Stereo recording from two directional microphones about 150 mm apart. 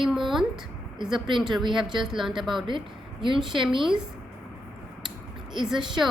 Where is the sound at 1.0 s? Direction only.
Centre (ahead or behind).